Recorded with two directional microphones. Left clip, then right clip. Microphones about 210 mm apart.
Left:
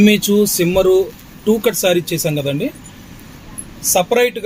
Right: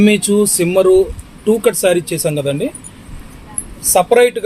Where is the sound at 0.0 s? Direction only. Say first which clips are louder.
Right 1 dB; 5° right (ahead or behind).